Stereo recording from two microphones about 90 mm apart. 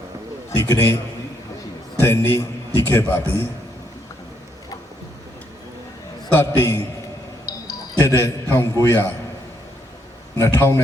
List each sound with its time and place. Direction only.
0.5 s a man's voice: 35° left (ahead or behind)
2.0 s a man's voice: 30° left (ahead or behind)
6.5 s a man's voice: 35° left (ahead or behind)
7.4 s music: 45° left (ahead or behind)
8.0 s a man's voice: 30° left (ahead or behind)
10.3 s a man's voice: 30° left (ahead or behind)